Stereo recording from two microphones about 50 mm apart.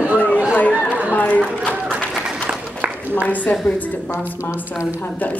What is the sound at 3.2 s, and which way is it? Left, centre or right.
Speech, left.